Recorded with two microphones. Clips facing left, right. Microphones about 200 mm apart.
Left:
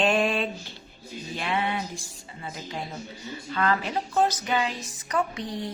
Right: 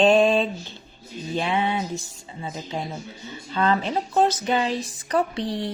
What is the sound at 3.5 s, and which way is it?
A woman's voice, 25° right (ahead or behind).